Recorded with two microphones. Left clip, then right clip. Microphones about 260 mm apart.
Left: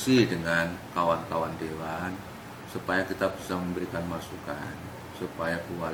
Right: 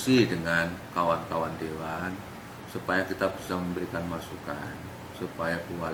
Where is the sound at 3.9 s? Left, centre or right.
Centre.